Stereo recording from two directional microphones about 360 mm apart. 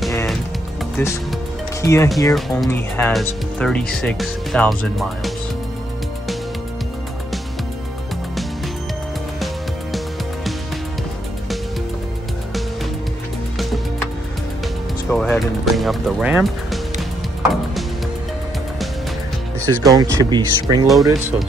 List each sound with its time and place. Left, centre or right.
0.0 s music: centre
0.9 s speech: centre
15.0 s speech: centre
19.6 s speech: centre
20.8 s speech: centre